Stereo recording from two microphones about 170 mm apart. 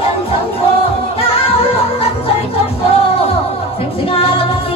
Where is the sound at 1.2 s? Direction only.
35° left (ahead or behind).